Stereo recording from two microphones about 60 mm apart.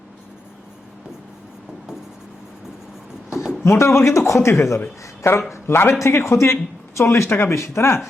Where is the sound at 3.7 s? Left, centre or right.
Left.